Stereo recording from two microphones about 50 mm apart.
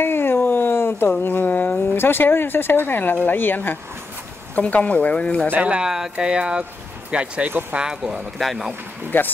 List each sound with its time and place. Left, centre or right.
0.0 s a sound: left
2.0 s speech: left
4.6 s speech: left
5.6 s speech: right
8.4 s speech: centre
9.1 s speech: left